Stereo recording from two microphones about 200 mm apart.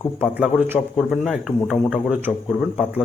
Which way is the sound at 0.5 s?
5° right (ahead or behind).